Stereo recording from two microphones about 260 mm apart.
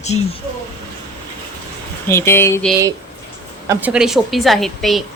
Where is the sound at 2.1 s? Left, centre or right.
Centre.